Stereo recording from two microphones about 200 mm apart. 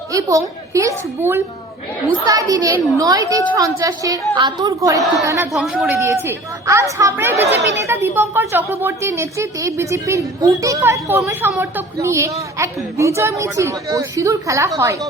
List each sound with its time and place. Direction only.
0.1 s a woman's voice: 15° right (ahead or behind)
5.5 s a woman's voice: centre (ahead or behind)
6.0 s a woman's voice: 15° right (ahead or behind)